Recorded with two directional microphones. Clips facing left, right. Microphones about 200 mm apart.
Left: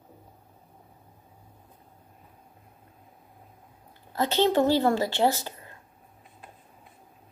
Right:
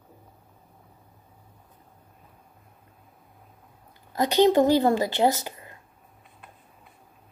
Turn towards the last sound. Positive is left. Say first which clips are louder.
# right 2 dB
turn(degrees=-15)  # may be behind; listen again after turning